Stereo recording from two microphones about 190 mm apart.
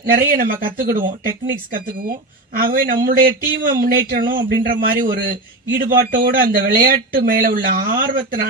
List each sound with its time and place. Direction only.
0.0 s speech: 50° right (ahead or behind)